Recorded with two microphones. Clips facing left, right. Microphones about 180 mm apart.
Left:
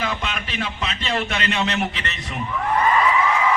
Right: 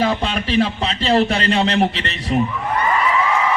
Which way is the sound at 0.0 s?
35° right (ahead or behind).